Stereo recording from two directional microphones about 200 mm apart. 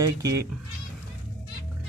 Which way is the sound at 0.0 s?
15° right (ahead or behind).